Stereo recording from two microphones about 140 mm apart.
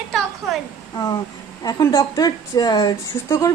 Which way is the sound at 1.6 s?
25° left (ahead or behind).